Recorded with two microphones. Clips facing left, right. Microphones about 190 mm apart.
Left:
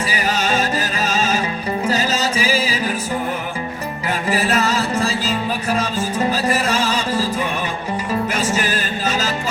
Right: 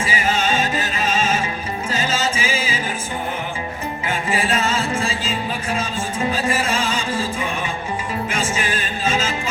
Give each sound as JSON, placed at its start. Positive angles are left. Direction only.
{"t": 0.1, "sound": "music", "side_deg": 40}
{"t": 4.3, "sound": "music", "side_deg": 40}
{"t": 8.3, "sound": "music", "side_deg": 40}